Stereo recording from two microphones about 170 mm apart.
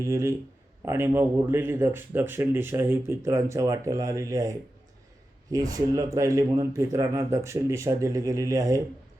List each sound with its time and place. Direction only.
0.0 s speech: 15° right (ahead or behind)